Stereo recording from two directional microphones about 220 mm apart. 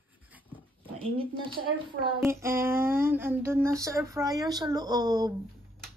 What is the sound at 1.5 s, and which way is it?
Speech, 20° right (ahead or behind).